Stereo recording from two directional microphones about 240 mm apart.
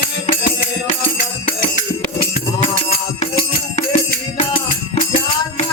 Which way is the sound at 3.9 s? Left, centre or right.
Left.